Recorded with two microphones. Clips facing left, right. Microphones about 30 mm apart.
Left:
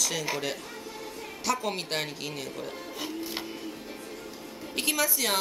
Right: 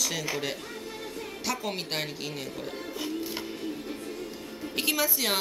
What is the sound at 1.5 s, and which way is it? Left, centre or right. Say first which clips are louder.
A woman's voice: left 3 dB; centre.